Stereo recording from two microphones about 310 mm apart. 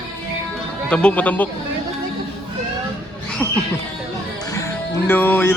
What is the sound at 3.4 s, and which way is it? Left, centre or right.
Speech, centre.